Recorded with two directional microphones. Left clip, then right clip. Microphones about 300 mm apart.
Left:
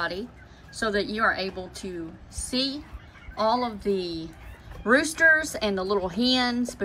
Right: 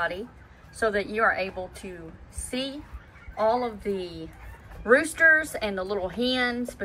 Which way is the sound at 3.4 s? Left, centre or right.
Centre.